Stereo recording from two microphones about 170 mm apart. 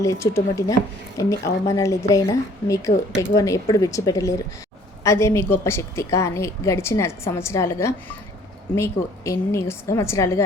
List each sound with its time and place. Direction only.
0.0 s a woman's voice: 15° left (ahead or behind)